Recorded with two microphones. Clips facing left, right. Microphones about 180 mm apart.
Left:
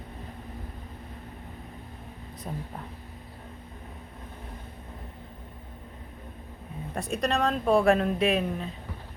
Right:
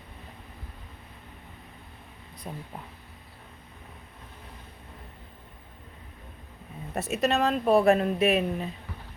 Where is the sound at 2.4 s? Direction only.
5° right (ahead or behind).